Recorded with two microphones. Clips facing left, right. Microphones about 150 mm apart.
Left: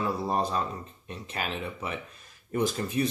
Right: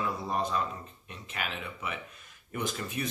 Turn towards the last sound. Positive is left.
turn(degrees=35)  # may be behind; listen again after turning